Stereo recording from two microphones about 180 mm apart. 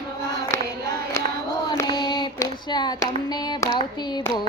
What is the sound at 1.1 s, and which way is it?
Female singing, 20° left (ahead or behind).